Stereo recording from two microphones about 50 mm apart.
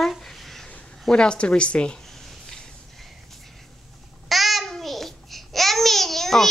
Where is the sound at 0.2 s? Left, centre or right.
Centre.